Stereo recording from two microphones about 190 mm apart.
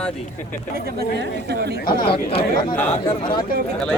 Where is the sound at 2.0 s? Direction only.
25° left (ahead or behind).